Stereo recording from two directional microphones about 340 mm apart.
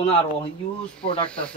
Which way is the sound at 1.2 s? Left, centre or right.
Centre.